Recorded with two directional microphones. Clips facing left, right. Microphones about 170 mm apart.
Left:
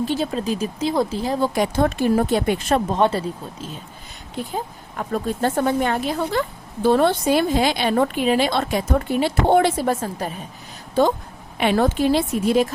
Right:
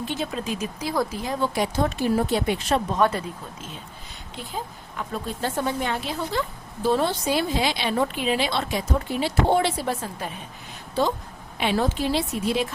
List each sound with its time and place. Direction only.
0.0 s speech: 35° left (ahead or behind)
1.5 s a woman's voice: 55° left (ahead or behind)
2.9 s speech: 30° left (ahead or behind)
4.4 s a woman's voice: 45° left (ahead or behind)
11.5 s a woman's voice: 55° left (ahead or behind)